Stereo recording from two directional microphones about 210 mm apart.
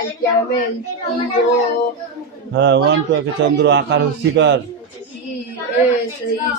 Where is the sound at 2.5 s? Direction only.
55° right (ahead or behind).